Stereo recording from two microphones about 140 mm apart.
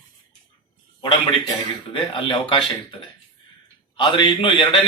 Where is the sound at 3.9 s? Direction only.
35° left (ahead or behind).